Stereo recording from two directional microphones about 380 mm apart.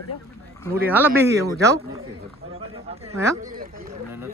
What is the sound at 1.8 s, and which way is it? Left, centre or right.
Speech, right.